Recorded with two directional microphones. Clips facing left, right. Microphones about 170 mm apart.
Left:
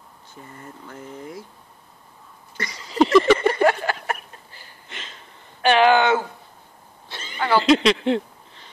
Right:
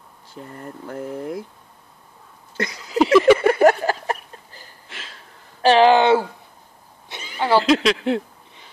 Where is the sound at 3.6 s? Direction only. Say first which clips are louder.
Right 4 dB; 35° right (ahead or behind).